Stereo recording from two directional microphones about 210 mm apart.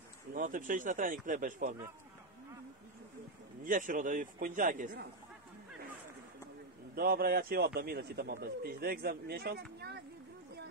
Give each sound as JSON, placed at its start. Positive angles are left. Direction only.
{"t": 0.3, "sound": "speech", "side_deg": -40}
{"t": 3.6, "sound": "speech", "side_deg": -40}
{"t": 7.0, "sound": "a man's voice", "side_deg": -45}